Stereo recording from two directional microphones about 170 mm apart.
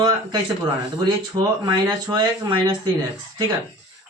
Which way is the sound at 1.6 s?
25° right (ahead or behind).